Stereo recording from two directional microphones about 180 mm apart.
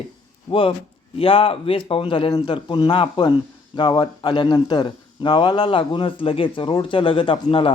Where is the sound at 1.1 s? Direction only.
30° left (ahead or behind).